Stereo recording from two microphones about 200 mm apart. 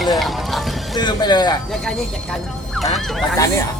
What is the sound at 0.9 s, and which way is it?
Speech, 20° left (ahead or behind).